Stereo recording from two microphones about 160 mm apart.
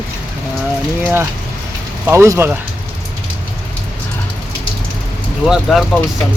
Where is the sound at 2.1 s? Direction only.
15° right (ahead or behind).